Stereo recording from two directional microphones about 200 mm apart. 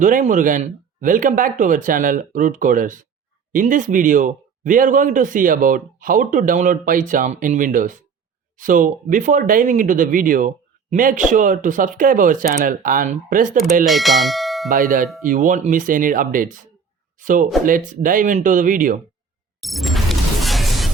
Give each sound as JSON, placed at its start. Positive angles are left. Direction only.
{"t": 0.0, "sound": "speech", "side_deg": -40}
{"t": 13.8, "sound": "bell", "side_deg": 0}
{"t": 14.7, "sound": "speech", "side_deg": -40}
{"t": 19.6, "sound": "a sound", "side_deg": 0}